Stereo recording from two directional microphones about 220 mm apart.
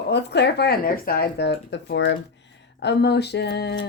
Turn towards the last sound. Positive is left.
turn(degrees=50)  # may be behind; listen again after turning